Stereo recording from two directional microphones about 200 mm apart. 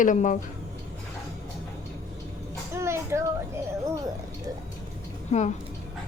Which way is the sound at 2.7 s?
15° right (ahead or behind).